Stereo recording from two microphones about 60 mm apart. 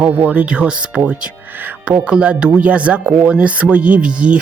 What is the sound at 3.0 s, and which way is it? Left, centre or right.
Speech, right.